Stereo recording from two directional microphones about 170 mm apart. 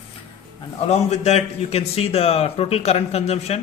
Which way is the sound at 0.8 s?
40° left (ahead or behind).